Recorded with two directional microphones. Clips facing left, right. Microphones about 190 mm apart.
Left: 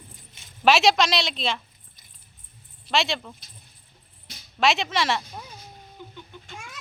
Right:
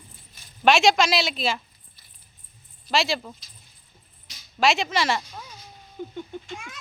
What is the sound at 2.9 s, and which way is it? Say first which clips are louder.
Speech: right 1 dB; centre (ahead or behind).